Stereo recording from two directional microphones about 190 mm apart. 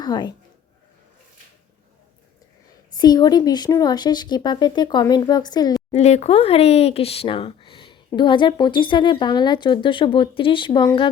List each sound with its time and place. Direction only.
0.0 s speech: 20° left (ahead or behind)
2.9 s speech: 20° left (ahead or behind)
5.9 s speech: 35° left (ahead or behind)